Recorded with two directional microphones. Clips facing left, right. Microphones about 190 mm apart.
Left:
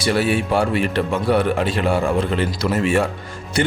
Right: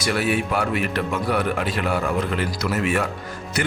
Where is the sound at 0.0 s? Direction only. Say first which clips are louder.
Left 3 dB; 30° left (ahead or behind).